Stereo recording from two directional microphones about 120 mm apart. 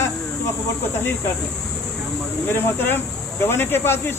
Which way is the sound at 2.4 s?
15° left (ahead or behind).